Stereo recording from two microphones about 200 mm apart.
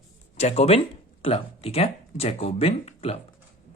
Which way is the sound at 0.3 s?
30° left (ahead or behind).